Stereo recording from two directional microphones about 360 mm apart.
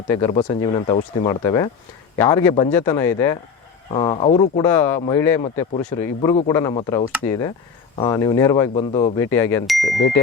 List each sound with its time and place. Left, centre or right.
0.1 s speech: centre
9.8 s speech: left